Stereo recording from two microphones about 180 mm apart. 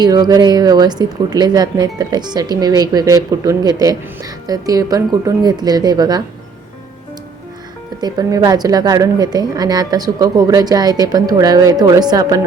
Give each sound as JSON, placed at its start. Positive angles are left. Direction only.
{"t": 0.0, "sound": "speech", "side_deg": -20}
{"t": 8.0, "sound": "speech", "side_deg": -20}